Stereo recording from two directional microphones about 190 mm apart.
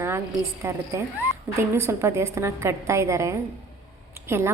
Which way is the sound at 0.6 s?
15° right (ahead or behind).